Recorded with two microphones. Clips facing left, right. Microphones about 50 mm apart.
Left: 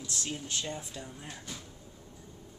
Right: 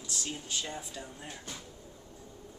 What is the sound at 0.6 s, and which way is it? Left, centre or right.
Speech, centre.